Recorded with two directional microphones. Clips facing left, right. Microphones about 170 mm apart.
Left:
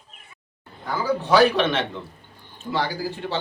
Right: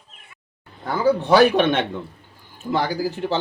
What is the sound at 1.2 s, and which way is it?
Speech, 50° right (ahead or behind).